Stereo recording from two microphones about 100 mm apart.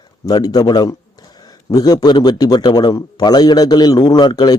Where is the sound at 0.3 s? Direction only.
45° left (ahead or behind).